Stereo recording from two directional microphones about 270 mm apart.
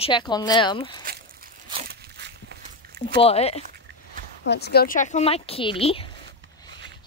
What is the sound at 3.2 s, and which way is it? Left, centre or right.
Speech, left.